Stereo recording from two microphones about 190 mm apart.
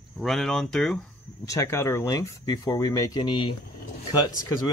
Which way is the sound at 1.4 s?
15° left (ahead or behind).